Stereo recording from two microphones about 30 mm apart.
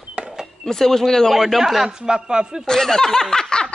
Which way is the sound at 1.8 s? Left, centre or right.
Right.